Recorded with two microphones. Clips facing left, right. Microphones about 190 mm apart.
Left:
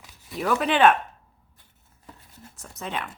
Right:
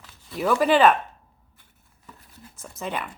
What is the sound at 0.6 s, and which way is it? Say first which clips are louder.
Speech: right 2 dB; centre (ahead or behind).